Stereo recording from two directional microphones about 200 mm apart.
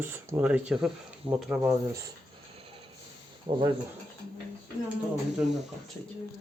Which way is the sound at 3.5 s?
25° right (ahead or behind).